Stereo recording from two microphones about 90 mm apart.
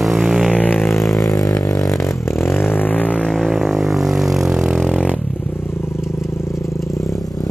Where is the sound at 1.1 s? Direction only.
40° left (ahead or behind).